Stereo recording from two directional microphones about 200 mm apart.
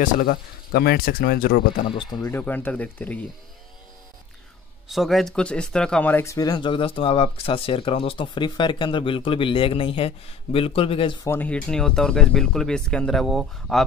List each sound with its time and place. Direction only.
0.0 s speech: 45° left (ahead or behind)
1.9 s speech: 25° left (ahead or behind); by 3.3 s 5° left (ahead or behind)
4.8 s speech: centre (ahead or behind); by 11.1 s 25° left (ahead or behind)
11.2 s speech: 10° left (ahead or behind)